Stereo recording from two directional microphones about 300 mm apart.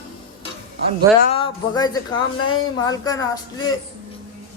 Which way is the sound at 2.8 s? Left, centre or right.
Centre.